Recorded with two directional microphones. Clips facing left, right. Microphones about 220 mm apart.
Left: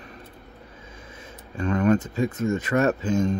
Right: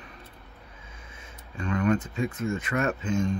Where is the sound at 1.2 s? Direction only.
40° left (ahead or behind).